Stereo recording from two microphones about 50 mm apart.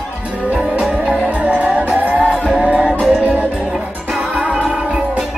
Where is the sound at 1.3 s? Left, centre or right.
Right.